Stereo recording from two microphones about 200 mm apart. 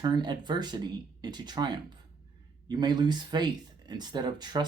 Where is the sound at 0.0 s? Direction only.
20° right (ahead or behind).